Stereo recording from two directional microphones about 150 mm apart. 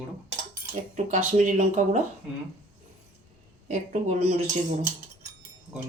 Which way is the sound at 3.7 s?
55° right (ahead or behind).